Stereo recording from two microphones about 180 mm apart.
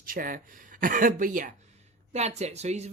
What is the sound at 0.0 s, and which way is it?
Speech, 50° right (ahead or behind).